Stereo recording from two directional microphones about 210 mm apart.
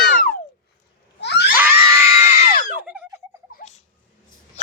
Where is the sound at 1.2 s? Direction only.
55° left (ahead or behind).